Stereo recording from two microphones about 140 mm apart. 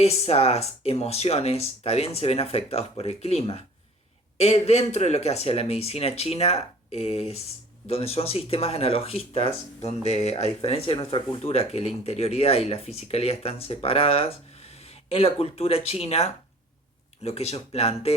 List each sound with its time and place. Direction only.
0.0 s speech: 50° left (ahead or behind)